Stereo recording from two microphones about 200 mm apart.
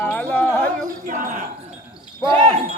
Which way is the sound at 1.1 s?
40° right (ahead or behind).